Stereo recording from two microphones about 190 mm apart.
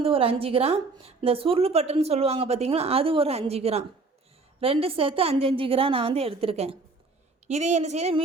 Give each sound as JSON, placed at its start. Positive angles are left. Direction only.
{"t": 0.0, "sound": "a woman's voice", "side_deg": -30}